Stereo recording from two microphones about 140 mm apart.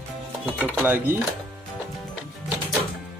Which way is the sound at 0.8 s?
15° right (ahead or behind).